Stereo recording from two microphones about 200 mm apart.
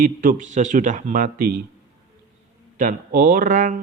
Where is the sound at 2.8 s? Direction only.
40° right (ahead or behind).